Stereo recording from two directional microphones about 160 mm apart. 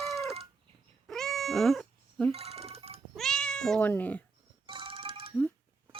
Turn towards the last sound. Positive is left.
turn(degrees=-35)  # may be behind; listen again after turning